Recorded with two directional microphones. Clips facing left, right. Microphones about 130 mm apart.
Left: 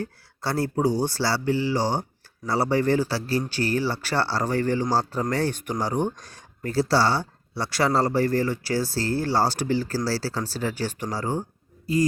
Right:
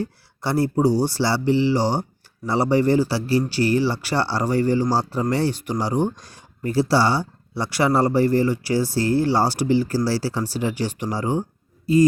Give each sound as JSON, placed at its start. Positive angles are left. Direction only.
{"t": 0.0, "sound": "speech", "side_deg": -15}
{"t": 3.5, "sound": "speech", "side_deg": 45}
{"t": 4.0, "sound": "speech", "side_deg": -15}
{"t": 11.9, "sound": "a sound", "side_deg": -25}